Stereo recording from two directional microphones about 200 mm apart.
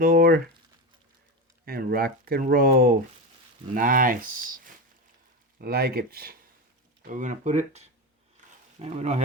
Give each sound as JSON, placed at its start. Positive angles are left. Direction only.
{"t": 0.0, "sound": "speech", "side_deg": -45}
{"t": 1.6, "sound": "speech", "side_deg": -50}
{"t": 7.1, "sound": "speech", "side_deg": -35}